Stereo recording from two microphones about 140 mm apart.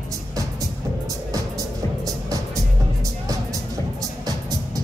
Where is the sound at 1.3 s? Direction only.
25° right (ahead or behind).